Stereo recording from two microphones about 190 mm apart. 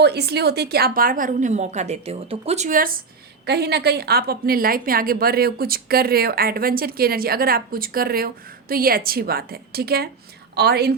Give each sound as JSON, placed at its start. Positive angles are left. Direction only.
{"t": 0.0, "sound": "a woman's voice", "side_deg": -60}
{"t": 3.4, "sound": "a woman's voice", "side_deg": -60}